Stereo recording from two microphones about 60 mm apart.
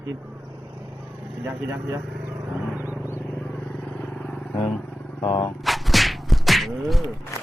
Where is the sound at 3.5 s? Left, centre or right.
Centre.